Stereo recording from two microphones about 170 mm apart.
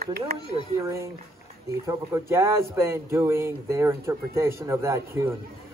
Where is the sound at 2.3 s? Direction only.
15° right (ahead or behind).